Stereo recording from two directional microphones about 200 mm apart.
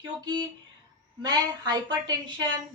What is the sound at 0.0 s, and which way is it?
A woman's voice, 20° right (ahead or behind).